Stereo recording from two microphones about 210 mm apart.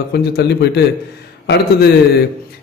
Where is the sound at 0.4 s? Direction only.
50° left (ahead or behind).